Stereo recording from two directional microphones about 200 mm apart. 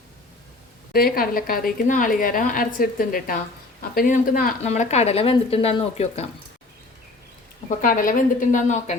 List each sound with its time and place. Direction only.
0.9 s a woman's voice: 45° left (ahead or behind); by 6.2 s 30° left (ahead or behind)
7.8 s a woman's voice: 45° left (ahead or behind)